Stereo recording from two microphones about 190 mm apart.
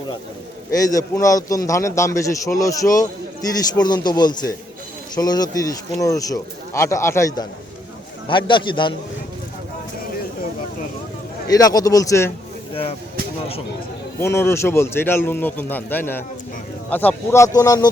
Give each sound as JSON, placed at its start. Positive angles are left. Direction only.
{"t": 0.8, "sound": "a man's voice", "side_deg": 20}
{"t": 11.4, "sound": "a man's voice", "side_deg": 20}
{"t": 14.2, "sound": "a man's voice", "side_deg": 15}